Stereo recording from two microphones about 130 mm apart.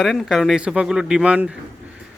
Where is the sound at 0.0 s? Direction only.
Centre (ahead or behind).